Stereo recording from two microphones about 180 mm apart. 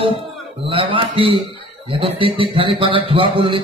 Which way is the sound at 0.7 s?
30° right (ahead or behind).